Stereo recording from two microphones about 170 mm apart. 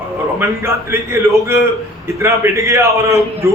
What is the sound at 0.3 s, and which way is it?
A man's voice, 15° right (ahead or behind).